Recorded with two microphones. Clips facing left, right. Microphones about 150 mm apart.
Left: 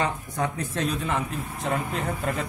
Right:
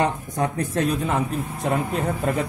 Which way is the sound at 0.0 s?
45° right (ahead or behind).